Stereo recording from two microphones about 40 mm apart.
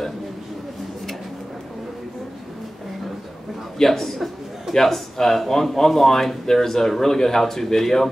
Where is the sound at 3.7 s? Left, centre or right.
Centre.